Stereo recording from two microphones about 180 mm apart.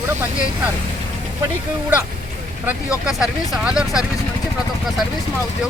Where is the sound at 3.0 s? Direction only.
Centre (ahead or behind).